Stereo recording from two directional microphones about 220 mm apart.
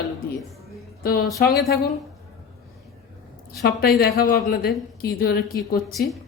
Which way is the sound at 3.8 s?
45° left (ahead or behind).